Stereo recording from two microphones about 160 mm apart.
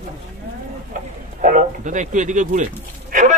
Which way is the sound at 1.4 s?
55° right (ahead or behind).